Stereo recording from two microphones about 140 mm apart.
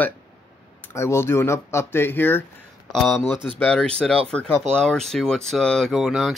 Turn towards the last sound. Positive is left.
turn(degrees=0)  # may be behind; listen again after turning